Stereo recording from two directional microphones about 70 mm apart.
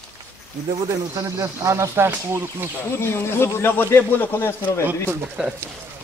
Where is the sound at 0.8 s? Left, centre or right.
Right.